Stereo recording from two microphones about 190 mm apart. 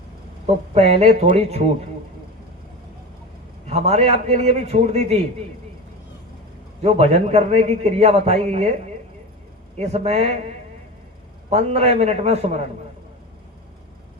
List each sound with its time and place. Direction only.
0.7 s a man's voice: 35° right (ahead or behind)
3.7 s a man's voice: 35° right (ahead or behind)
6.8 s a man's voice: 30° right (ahead or behind)
9.7 s a man's voice: 35° right (ahead or behind)
11.4 s a man's voice: 35° right (ahead or behind)